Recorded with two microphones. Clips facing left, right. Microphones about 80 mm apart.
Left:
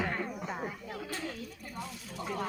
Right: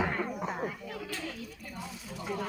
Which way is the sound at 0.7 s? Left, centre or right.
Left.